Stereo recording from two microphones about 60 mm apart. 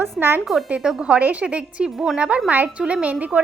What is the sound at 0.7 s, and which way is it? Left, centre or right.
A woman's voice, centre.